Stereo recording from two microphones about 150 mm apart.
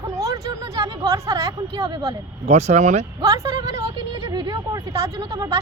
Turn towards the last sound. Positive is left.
turn(degrees=-20)  # may be behind; listen again after turning